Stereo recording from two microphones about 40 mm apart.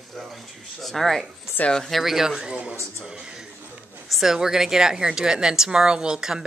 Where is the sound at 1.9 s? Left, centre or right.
Centre.